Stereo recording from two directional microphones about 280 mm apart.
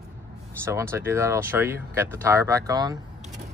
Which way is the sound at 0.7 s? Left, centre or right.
Centre.